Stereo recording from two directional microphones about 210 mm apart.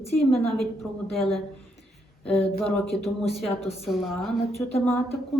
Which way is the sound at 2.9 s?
30° left (ahead or behind).